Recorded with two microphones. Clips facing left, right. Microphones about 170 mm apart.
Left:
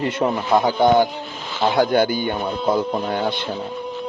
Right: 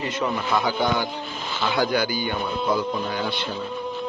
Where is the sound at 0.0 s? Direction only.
55° left (ahead or behind).